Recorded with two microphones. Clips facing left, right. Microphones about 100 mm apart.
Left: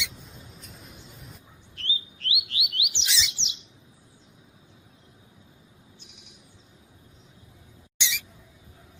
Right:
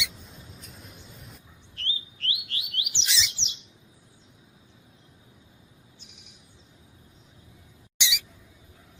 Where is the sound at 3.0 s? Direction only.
Centre (ahead or behind).